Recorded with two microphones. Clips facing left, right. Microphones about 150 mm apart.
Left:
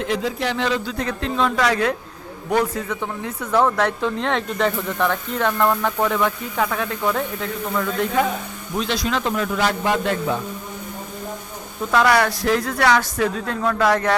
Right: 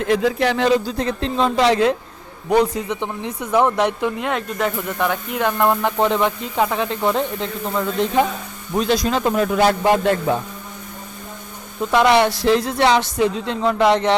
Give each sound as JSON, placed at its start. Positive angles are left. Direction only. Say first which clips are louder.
{"t": 0.1, "sound": "speech", "louder": "right 8 dB", "side_deg": -65}
{"t": 0.9, "sound": "speech", "louder": "right 3 dB", "side_deg": -30}
{"t": 8.8, "sound": "speech", "louder": "right 4 dB", "side_deg": -45}
{"t": 11.9, "sound": "speech", "louder": "right 3 dB", "side_deg": -20}